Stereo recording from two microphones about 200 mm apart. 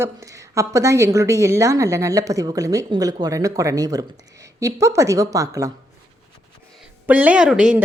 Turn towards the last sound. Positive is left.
turn(degrees=-5)  # may be behind; listen again after turning